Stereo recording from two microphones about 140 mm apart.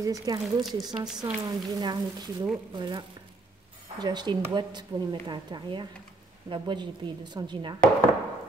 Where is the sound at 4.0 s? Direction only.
30° right (ahead or behind).